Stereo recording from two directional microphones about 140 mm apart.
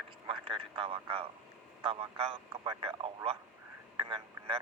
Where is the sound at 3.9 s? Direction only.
35° right (ahead or behind).